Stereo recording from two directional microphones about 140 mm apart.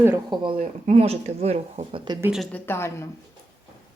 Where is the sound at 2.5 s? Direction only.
15° left (ahead or behind).